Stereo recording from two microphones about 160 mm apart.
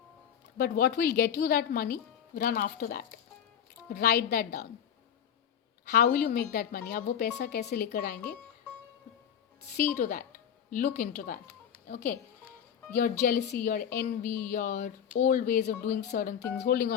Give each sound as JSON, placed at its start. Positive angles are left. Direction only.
{"t": 0.5, "sound": "a woman's voice", "side_deg": 80}
{"t": 3.8, "sound": "a woman's voice", "side_deg": 90}
{"t": 5.9, "sound": "a woman's voice", "side_deg": 75}
{"t": 9.9, "sound": "a woman's voice", "side_deg": 65}
{"t": 14.2, "sound": "music", "side_deg": 10}
{"t": 14.5, "sound": "a woman's voice", "side_deg": 85}